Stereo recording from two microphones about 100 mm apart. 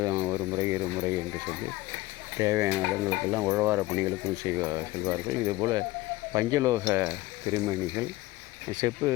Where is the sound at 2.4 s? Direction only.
30° right (ahead or behind).